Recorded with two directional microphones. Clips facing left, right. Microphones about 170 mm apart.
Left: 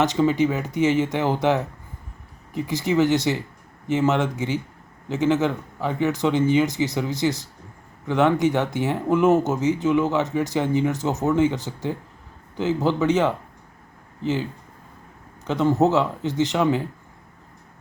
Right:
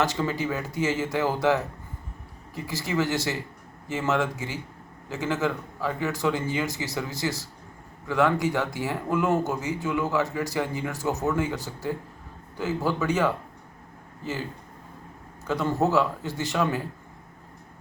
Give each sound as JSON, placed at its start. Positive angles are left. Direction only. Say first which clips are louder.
{"t": 0.0, "sound": "speech", "louder": "left 7 dB", "side_deg": 20}
{"t": 15.4, "sound": "speech", "louder": "left 5 dB", "side_deg": 20}